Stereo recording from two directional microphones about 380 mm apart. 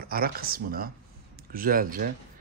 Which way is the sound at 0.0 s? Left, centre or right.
Right.